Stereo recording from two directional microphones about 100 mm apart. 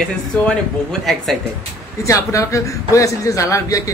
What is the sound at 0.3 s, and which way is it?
Speech, 10° left (ahead or behind).